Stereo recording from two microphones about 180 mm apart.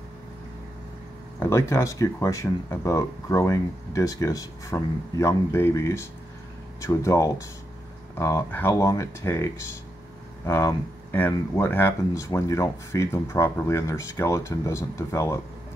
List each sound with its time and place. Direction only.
1.4 s speech: 15° left (ahead or behind)